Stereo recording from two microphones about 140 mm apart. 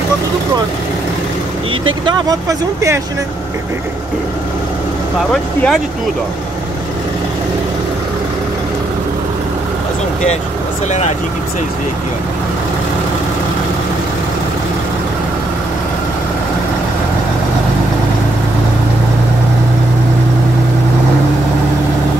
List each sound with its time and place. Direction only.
2.0 s speech: 25° right (ahead or behind)
5.3 s speech: 5° left (ahead or behind)
10.9 s speech: 55° left (ahead or behind)